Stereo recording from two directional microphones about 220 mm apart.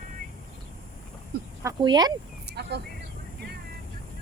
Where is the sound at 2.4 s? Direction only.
50° right (ahead or behind).